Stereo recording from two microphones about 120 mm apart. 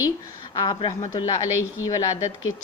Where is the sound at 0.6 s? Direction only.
40° left (ahead or behind).